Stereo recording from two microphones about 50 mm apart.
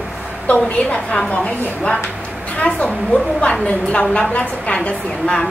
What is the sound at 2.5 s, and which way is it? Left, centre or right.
A woman's voice, left.